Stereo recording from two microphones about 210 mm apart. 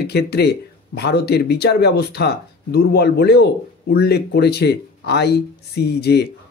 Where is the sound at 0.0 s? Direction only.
50° left (ahead or behind).